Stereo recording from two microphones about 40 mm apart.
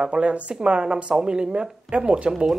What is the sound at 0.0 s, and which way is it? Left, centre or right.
Speech, right.